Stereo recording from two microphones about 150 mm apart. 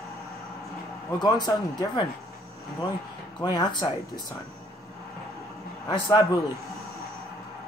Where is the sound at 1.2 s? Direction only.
30° left (ahead or behind).